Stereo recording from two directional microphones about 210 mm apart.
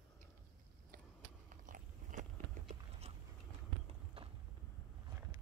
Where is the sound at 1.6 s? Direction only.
40° right (ahead or behind).